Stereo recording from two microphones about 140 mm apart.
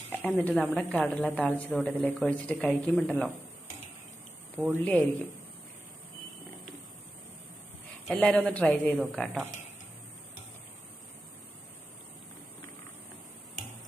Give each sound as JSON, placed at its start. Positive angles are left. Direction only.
{"t": 0.1, "sound": "speech", "side_deg": 10}
{"t": 4.8, "sound": "speech", "side_deg": 10}
{"t": 8.1, "sound": "speech", "side_deg": 5}